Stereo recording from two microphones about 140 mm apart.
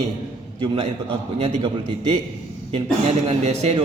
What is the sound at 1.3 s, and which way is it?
Speech, 45° right (ahead or behind).